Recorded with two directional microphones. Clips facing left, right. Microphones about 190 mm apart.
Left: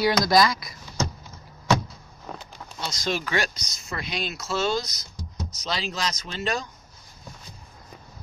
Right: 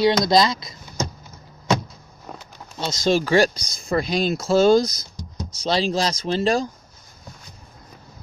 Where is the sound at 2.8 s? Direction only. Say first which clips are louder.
Right 9 dB; 25° right (ahead or behind).